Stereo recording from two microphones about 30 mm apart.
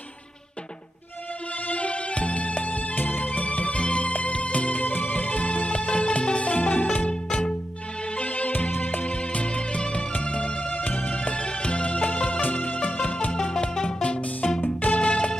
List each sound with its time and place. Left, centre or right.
1.7 s music: left
4.8 s music: left
6.5 s music: left
7.1 s music: left
8.2 s music: left
8.5 s music: left
9.0 s music: left
10.7 s music: left
11.0 s music: left
12.4 s music: left
13.3 s music: left
14.0 s music: left